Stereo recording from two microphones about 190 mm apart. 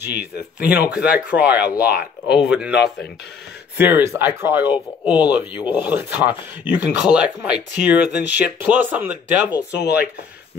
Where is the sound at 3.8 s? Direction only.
10° right (ahead or behind).